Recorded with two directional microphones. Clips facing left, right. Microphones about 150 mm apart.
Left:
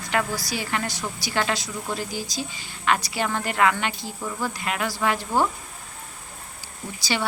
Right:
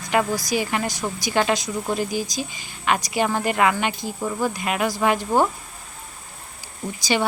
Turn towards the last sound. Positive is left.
turn(degrees=-15)  # may be behind; listen again after turning